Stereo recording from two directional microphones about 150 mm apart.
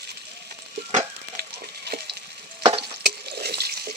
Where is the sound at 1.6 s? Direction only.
90° right.